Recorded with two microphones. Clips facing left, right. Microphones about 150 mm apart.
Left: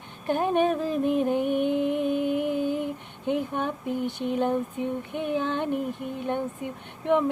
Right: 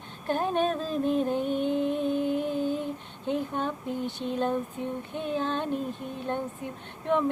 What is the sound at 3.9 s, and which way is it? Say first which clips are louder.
Female singing: left 3 dB; 15° left (ahead or behind).